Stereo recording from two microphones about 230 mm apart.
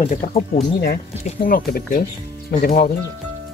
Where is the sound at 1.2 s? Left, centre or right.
Left.